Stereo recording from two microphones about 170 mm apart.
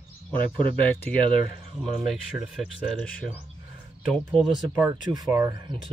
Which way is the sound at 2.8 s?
5° left (ahead or behind).